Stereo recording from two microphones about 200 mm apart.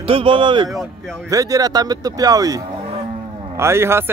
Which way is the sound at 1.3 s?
15° right (ahead or behind).